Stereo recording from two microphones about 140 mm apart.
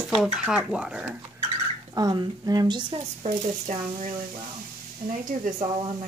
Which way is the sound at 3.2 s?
60° right (ahead or behind).